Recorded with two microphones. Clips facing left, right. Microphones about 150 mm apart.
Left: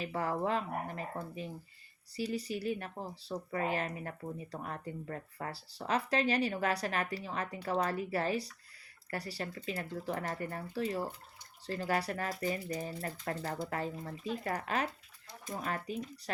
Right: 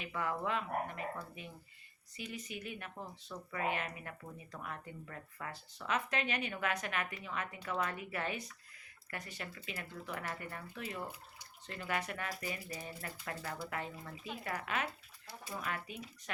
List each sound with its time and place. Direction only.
0.0 s speech: 35° left (ahead or behind)